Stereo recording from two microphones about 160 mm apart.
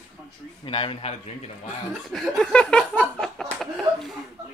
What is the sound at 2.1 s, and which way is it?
Speech, 5° left (ahead or behind).